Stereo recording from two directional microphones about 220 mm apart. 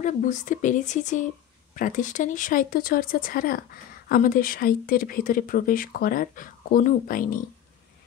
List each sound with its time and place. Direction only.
0.0 s speech: 35° left (ahead or behind)